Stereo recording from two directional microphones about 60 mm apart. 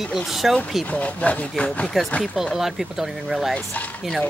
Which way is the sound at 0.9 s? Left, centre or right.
Left.